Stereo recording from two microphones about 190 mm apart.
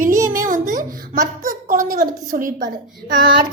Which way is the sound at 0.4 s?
45° right (ahead or behind).